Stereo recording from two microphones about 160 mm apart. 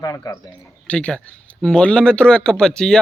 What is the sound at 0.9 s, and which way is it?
Speech, 5° left (ahead or behind).